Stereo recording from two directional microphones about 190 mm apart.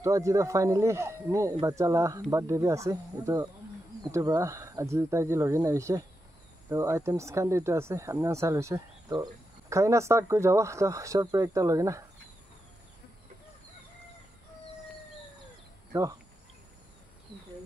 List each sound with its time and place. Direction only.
0.0 s speech: 15° right (ahead or behind)
15.9 s speech: 15° right (ahead or behind)